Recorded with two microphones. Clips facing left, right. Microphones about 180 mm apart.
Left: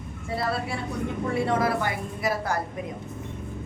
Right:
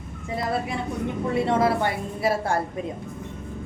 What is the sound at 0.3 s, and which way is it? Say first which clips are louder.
A woman's voice: right 2 dB; 20° right (ahead or behind).